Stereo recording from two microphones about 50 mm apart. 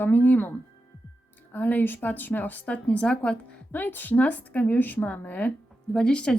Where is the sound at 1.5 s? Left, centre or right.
Left.